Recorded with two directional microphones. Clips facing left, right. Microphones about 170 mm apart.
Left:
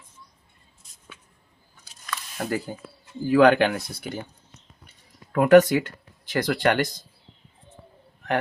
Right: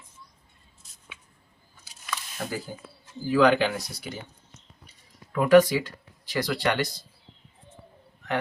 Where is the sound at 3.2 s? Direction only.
60° left (ahead or behind).